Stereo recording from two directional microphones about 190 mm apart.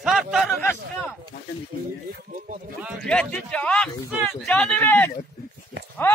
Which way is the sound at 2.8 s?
Centre (ahead or behind).